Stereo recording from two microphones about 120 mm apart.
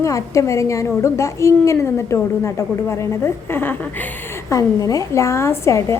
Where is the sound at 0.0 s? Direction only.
25° left (ahead or behind).